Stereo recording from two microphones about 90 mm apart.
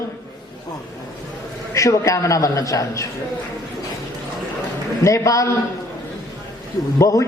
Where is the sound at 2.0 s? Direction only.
35° left (ahead or behind).